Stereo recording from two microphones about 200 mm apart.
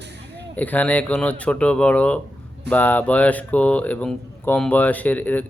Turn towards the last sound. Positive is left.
turn(degrees=10)  # may be behind; listen again after turning